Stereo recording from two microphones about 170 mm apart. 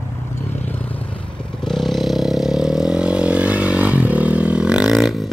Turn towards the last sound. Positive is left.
turn(degrees=0)  # may be behind; listen again after turning